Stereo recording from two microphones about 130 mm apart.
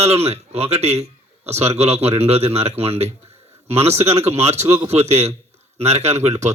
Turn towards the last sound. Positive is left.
turn(degrees=-60)  # may be behind; listen again after turning